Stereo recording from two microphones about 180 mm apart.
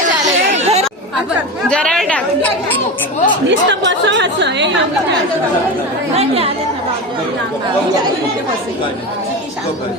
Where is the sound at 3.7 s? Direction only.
75° right (ahead or behind).